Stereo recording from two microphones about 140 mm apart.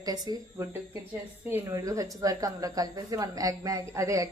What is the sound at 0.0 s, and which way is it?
A woman's voice, 30° right (ahead or behind).